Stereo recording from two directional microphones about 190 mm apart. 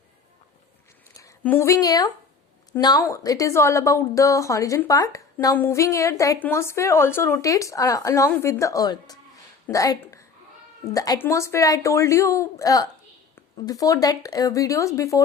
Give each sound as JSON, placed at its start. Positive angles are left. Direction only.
{"t": 1.1, "sound": "a woman's voice", "side_deg": 15}
{"t": 9.6, "sound": "a sound", "side_deg": 15}
{"t": 10.9, "sound": "a woman's voice", "side_deg": 20}